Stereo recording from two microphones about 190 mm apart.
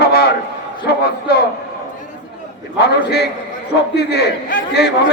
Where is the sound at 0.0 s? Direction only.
55° left (ahead or behind).